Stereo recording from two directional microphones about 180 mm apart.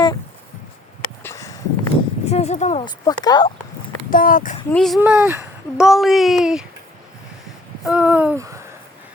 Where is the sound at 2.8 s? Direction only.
20° left (ahead or behind).